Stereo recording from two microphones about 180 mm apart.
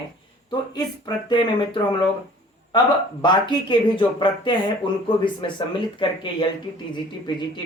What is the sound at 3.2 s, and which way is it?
Speech, 25° left (ahead or behind).